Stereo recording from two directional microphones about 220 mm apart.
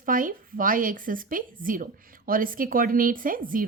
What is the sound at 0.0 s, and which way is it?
Speech, 40° right (ahead or behind).